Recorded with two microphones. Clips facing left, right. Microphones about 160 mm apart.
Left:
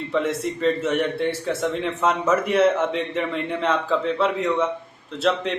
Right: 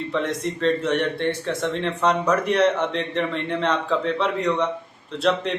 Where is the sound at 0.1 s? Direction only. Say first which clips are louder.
Left 3 dB; 5° left (ahead or behind).